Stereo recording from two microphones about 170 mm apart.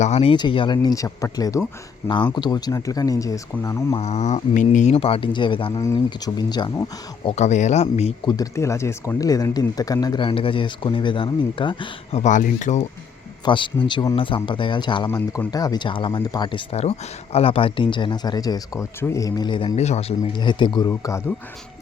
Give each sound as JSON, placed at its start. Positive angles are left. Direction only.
{"t": 0.0, "sound": "speech", "side_deg": 40}
{"t": 3.9, "sound": "speech", "side_deg": 40}
{"t": 5.8, "sound": "speech", "side_deg": 20}
{"t": 7.3, "sound": "speech", "side_deg": 45}
{"t": 8.2, "sound": "speech", "side_deg": 25}
{"t": 12.2, "sound": "speech", "side_deg": 45}
{"t": 13.4, "sound": "speech", "side_deg": 25}
{"t": 19.7, "sound": "speech", "side_deg": 40}